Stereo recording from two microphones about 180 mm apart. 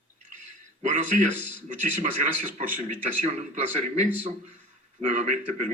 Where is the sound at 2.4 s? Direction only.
45° right (ahead or behind).